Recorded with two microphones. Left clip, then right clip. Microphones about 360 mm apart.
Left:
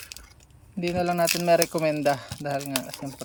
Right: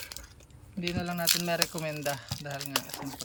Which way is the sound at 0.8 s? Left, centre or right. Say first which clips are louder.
Left 10 dB; centre.